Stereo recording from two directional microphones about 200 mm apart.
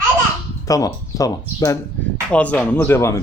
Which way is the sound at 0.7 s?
15° left (ahead or behind).